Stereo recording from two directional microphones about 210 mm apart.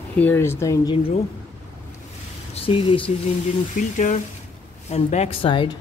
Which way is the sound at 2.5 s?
25° left (ahead or behind).